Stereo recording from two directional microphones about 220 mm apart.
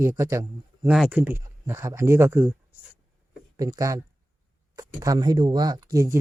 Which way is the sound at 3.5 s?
15° right (ahead or behind).